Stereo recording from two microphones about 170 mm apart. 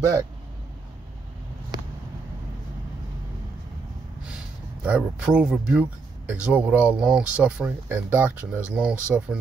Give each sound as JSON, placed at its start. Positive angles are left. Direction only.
{"t": 0.0, "sound": "speech", "side_deg": -20}
{"t": 4.2, "sound": "speech", "side_deg": -5}